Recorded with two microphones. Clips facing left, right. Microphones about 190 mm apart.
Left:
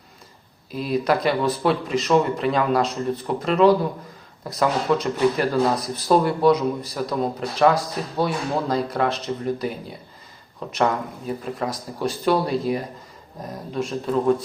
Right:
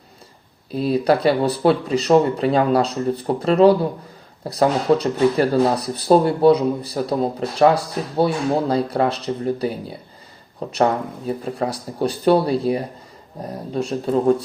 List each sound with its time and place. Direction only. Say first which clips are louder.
0.7 s speech: right 4 dB; 30° right (ahead or behind)